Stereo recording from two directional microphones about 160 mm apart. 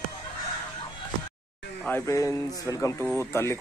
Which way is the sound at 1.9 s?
15° left (ahead or behind).